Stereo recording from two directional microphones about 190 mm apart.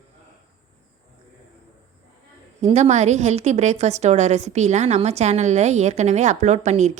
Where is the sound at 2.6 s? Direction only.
35° right (ahead or behind).